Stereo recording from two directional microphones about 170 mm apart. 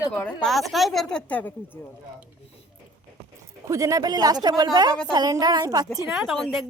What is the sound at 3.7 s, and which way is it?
Speech, 20° right (ahead or behind).